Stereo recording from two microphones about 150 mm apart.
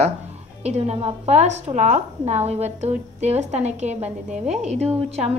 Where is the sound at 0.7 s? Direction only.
45° right (ahead or behind).